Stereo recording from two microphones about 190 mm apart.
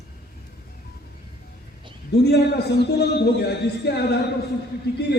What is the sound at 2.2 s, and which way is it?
A man's voice, 60° left (ahead or behind).